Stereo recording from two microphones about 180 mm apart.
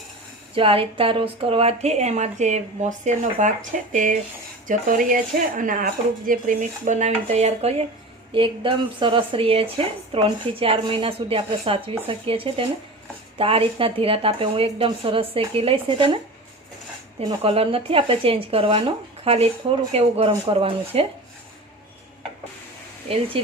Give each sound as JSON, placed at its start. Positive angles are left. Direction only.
{"t": 0.5, "sound": "a woman's voice", "side_deg": -30}